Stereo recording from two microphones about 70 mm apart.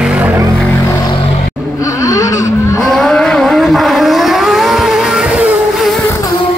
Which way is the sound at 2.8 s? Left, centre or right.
Centre.